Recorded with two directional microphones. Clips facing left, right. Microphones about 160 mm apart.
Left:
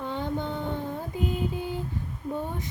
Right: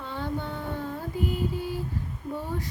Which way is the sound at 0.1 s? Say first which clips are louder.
Even; 20° left (ahead or behind).